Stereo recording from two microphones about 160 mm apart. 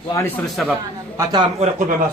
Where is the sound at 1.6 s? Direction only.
55° right (ahead or behind).